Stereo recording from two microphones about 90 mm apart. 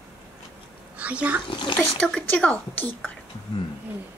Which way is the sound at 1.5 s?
65° left (ahead or behind).